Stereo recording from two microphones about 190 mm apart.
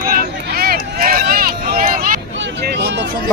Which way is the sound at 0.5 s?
50° right (ahead or behind).